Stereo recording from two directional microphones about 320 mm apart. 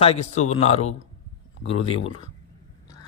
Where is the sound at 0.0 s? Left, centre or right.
Centre.